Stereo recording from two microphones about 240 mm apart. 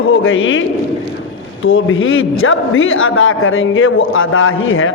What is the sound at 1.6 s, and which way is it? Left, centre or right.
A man's voice, left.